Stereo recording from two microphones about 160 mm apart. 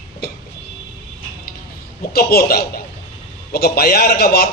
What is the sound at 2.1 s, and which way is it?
A man's voice, 70° left (ahead or behind).